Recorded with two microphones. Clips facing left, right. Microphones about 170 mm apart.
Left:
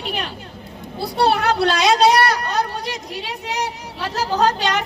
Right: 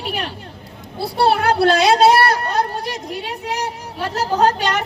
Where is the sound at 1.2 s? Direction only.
55° right (ahead or behind).